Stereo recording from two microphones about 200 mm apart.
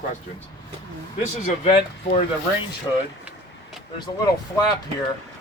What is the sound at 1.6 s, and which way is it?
Speech, 35° left (ahead or behind).